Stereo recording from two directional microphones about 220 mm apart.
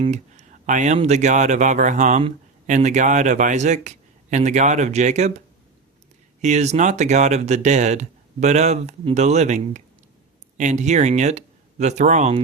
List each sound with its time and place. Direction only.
0.0 s speech: 30° right (ahead or behind)
6.4 s speech: 30° right (ahead or behind)